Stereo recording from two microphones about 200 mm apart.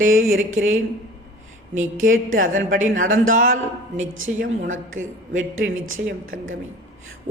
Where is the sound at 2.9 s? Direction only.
85° right.